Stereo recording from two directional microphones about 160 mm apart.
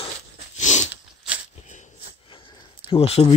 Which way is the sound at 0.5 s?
45° left (ahead or behind).